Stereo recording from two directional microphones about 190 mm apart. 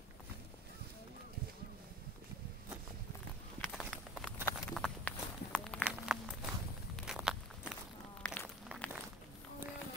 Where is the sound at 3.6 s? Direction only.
Centre (ahead or behind).